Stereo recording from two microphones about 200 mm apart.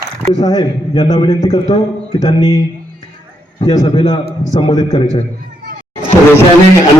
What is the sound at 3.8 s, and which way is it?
A man's voice, 25° left (ahead or behind).